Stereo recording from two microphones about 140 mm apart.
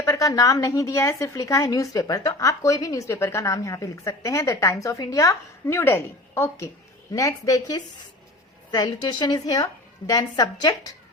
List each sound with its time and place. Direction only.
0.0 s a woman's voice: 25° left (ahead or behind)